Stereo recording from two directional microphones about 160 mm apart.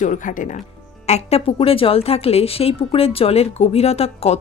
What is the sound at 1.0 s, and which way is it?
Speech, 40° left (ahead or behind).